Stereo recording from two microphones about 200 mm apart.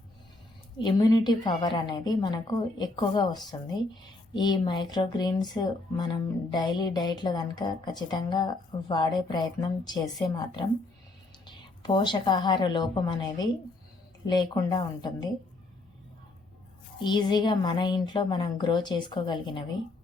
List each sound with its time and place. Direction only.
0.8 s a woman's voice: 20° left (ahead or behind)
11.4 s a woman's voice: 25° left (ahead or behind)
17.0 s a woman's voice: 20° left (ahead or behind)